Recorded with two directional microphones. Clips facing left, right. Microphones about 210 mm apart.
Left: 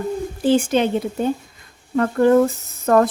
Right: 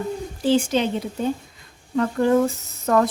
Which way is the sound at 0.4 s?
55° left (ahead or behind).